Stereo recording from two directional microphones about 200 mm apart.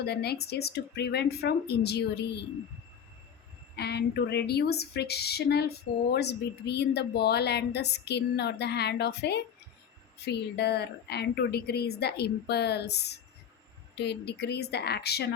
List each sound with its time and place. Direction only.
0.0 s a woman's voice: 55° left (ahead or behind)
3.8 s speech: 55° left (ahead or behind)